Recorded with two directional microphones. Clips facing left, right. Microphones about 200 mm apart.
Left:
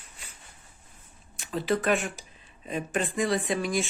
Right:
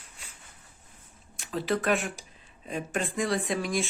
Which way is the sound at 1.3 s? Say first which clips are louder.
Left 1 dB; centre (ahead or behind).